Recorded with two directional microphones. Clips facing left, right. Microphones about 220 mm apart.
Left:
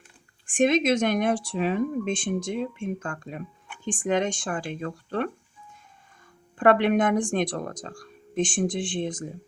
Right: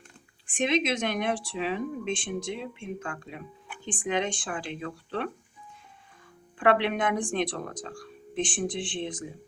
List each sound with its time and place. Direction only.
0.4 s speech: 50° left (ahead or behind)
6.6 s speech: 45° left (ahead or behind)